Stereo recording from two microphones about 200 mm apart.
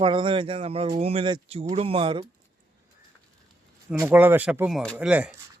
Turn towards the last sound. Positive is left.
turn(degrees=-5)  # may be behind; listen again after turning